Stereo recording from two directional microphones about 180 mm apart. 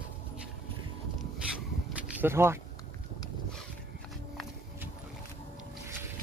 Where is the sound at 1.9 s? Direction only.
10° right (ahead or behind).